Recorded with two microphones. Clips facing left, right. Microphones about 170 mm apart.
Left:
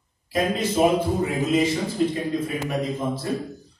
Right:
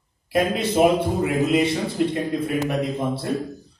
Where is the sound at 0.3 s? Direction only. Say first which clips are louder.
Right 2 dB; 65° right (ahead or behind).